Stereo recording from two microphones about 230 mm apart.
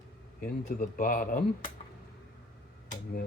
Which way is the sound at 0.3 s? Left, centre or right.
Left.